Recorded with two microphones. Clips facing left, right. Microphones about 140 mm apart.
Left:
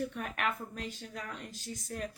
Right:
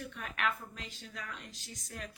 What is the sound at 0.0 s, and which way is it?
Speech, 45° left (ahead or behind).